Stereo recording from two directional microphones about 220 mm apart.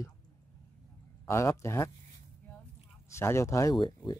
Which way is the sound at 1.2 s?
10° left (ahead or behind).